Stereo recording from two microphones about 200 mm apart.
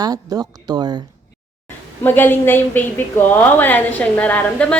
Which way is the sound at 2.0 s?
10° left (ahead or behind).